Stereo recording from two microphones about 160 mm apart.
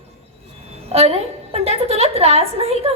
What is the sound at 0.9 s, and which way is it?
A woman's voice, 40° right (ahead or behind).